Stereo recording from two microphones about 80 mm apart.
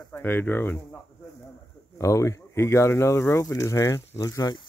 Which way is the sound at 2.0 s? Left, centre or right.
Left.